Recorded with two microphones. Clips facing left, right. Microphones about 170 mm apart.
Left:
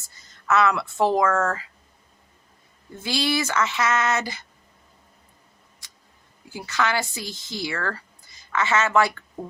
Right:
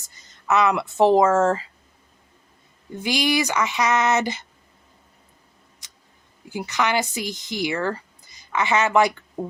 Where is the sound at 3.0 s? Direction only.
15° right (ahead or behind).